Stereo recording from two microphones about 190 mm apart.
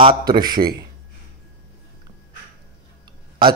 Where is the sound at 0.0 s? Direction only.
25° right (ahead or behind).